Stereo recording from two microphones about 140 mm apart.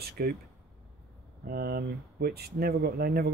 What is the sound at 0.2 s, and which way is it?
Speech, 90° right.